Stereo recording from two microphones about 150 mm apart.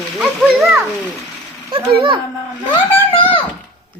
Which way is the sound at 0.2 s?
Centre (ahead or behind).